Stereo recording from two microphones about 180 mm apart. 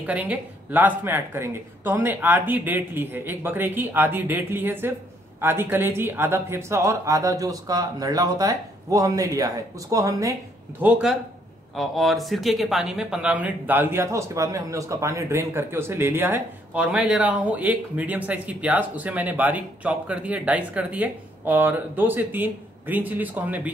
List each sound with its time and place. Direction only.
0.0 s speech: 10° right (ahead or behind)
10.8 s speech: 5° right (ahead or behind)